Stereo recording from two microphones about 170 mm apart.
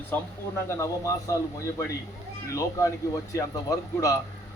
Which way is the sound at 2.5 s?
20° left (ahead or behind).